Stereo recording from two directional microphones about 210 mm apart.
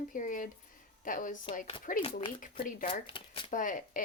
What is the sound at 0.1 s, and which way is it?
Speech, 40° left (ahead or behind).